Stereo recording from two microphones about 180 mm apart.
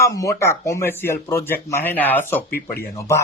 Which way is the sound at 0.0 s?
20° left (ahead or behind).